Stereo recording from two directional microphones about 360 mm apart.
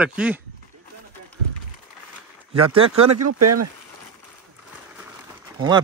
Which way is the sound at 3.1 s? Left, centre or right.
Right.